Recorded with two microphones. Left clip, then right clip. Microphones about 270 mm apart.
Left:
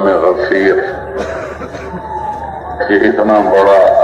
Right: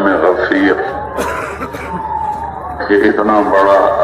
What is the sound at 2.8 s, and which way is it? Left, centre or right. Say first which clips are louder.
Speech: left 1 dB; right.